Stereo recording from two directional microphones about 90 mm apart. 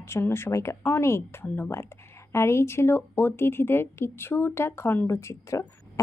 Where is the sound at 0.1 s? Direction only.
25° left (ahead or behind).